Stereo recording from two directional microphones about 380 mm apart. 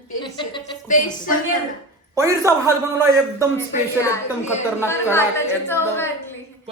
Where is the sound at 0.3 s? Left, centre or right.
Centre.